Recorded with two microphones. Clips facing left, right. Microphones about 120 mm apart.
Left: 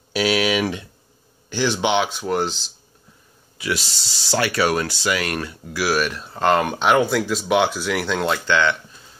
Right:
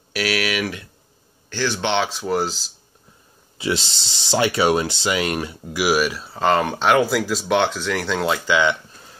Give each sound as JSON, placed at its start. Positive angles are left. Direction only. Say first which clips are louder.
{"t": 0.1, "sound": "a sound", "louder": "left 3 dB", "side_deg": 20}
{"t": 1.5, "sound": "speech", "louder": "left 2 dB", "side_deg": 15}
{"t": 3.5, "sound": "speech", "louder": "right 2 dB", "side_deg": -25}